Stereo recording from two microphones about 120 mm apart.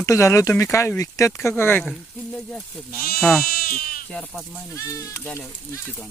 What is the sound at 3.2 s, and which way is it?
Speech, 5° left (ahead or behind).